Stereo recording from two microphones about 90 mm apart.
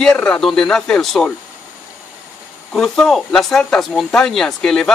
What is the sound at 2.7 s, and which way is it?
A man's voice, 5° left (ahead or behind).